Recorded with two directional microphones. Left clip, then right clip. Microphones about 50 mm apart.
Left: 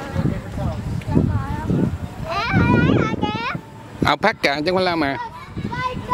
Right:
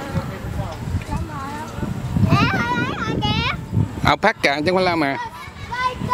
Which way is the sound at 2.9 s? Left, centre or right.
Right.